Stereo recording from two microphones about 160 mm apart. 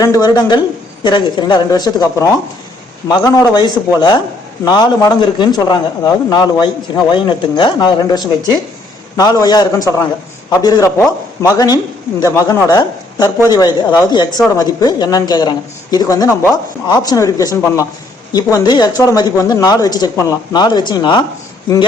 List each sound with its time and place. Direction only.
0.0 s a man's voice: 25° left (ahead or behind)